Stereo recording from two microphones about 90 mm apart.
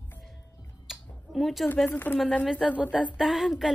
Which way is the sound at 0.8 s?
Centre (ahead or behind).